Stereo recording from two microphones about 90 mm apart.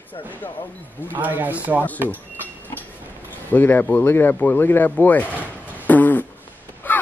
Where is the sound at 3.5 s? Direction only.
20° left (ahead or behind).